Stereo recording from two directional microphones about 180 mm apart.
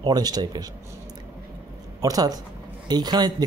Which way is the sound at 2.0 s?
20° right (ahead or behind).